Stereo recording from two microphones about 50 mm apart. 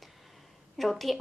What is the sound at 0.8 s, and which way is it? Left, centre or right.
Speech, centre.